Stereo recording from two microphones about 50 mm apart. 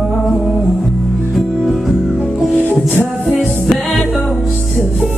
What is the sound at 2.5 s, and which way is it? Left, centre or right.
Music, left.